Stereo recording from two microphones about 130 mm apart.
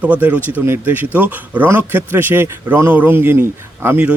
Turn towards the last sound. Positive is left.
turn(degrees=-15)  # may be behind; listen again after turning